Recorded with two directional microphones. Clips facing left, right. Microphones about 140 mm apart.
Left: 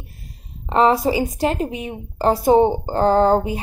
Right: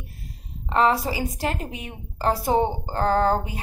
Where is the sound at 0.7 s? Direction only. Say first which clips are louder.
Left 5 dB; 20° left (ahead or behind).